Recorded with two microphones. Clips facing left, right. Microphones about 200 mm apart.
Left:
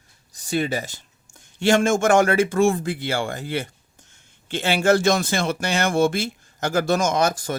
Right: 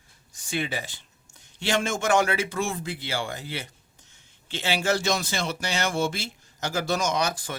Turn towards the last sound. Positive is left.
turn(degrees=45)  # may be behind; listen again after turning